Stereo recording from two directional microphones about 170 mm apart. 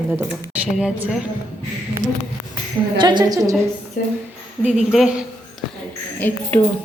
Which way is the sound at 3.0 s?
25° right (ahead or behind).